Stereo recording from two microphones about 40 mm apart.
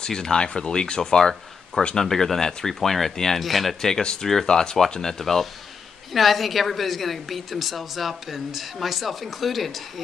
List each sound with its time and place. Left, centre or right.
0.0 s speech: centre
3.8 s a woman's voice: centre